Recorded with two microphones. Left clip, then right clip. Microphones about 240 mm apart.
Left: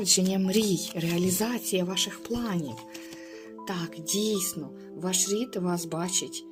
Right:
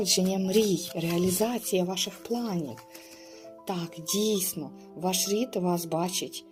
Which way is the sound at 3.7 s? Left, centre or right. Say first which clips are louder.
Even; centre.